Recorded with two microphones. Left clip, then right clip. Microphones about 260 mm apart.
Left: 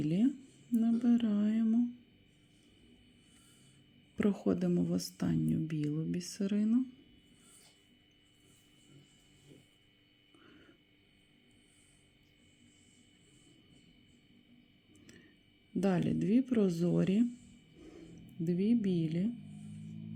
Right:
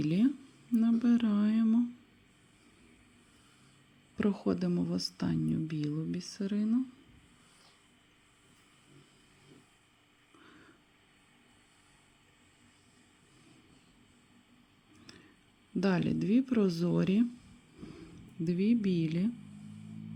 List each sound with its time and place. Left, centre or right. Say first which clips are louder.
0.7 s humming: right 2 dB; centre
4.1 s speech: even; centre
15.8 s speech: right 1 dB; centre
18.4 s humming: right 2 dB; centre